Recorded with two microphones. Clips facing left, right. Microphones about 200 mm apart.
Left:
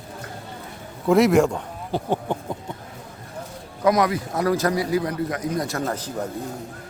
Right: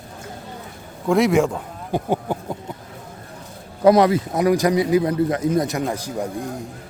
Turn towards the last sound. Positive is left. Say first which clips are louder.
# right 2 dB
turn(degrees=-10)  # may be behind; listen again after turning